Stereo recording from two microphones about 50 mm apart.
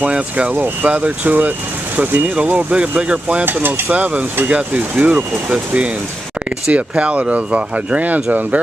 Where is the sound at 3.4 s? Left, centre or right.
Right.